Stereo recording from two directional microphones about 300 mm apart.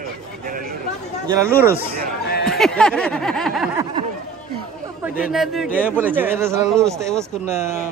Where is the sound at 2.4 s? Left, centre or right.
Centre.